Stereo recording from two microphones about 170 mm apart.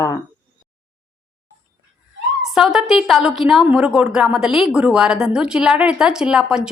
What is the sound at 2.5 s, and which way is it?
A woman's voice, 5° right (ahead or behind).